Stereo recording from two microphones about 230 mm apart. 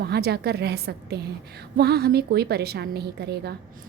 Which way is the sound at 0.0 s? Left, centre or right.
Right.